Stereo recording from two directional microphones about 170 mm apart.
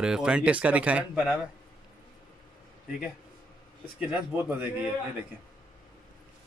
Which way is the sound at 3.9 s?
10° right (ahead or behind).